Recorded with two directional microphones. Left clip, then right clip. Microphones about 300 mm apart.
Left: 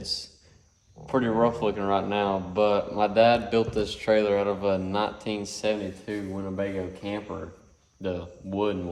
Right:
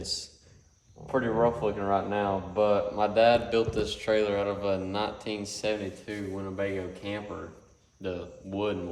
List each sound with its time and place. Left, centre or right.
0.1 s a man's voice: left